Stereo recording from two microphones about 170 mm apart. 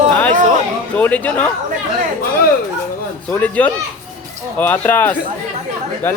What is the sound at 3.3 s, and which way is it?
A man's voice, 10° left (ahead or behind).